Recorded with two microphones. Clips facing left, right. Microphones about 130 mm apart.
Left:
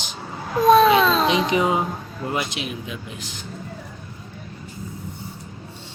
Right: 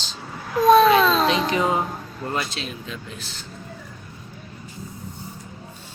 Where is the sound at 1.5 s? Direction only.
15° left (ahead or behind).